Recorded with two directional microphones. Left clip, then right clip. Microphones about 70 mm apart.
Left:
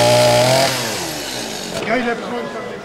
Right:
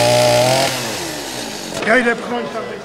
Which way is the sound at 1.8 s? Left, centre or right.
Right.